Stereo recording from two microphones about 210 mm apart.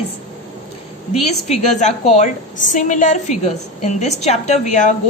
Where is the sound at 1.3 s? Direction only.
30° left (ahead or behind).